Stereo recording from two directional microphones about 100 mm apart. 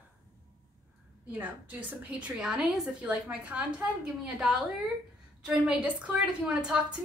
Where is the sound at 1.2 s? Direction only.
15° right (ahead or behind).